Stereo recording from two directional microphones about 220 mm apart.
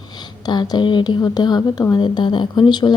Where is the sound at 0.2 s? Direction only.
20° left (ahead or behind).